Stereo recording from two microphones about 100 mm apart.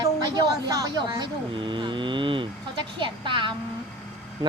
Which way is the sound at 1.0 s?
50° right (ahead or behind).